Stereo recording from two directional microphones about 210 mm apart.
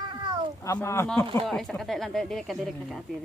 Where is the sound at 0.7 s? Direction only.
10° left (ahead or behind).